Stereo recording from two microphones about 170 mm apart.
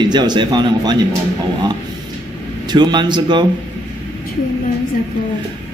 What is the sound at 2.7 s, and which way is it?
Speech, 25° right (ahead or behind).